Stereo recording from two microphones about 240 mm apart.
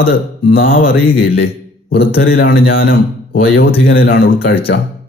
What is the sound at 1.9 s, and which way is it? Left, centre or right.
Speech, left.